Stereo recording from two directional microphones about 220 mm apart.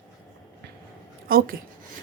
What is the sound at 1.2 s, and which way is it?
Speech, 40° right (ahead or behind).